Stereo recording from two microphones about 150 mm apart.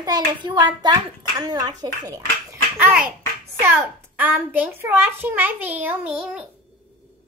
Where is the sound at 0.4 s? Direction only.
30° right (ahead or behind).